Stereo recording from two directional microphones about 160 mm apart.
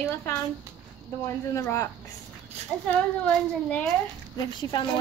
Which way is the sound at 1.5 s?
15° left (ahead or behind).